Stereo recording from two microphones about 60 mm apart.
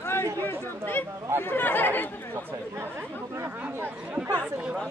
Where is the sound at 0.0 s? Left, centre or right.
Left.